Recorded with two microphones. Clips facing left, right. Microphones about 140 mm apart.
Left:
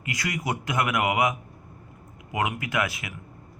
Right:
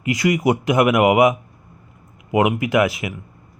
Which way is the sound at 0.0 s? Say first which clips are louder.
Right 13 dB; 20° right (ahead or behind).